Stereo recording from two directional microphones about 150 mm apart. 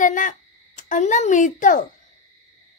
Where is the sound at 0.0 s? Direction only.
60° left (ahead or behind).